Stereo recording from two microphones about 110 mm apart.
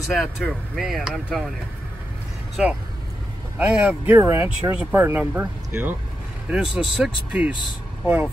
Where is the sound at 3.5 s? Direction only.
10° right (ahead or behind).